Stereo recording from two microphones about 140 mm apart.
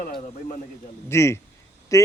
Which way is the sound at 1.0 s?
20° left (ahead or behind).